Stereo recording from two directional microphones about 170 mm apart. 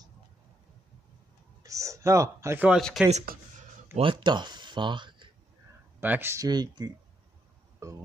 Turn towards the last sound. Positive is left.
turn(degrees=-20)  # may be behind; listen again after turning